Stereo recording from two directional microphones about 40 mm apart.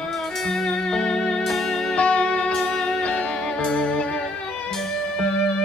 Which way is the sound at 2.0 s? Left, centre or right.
Left.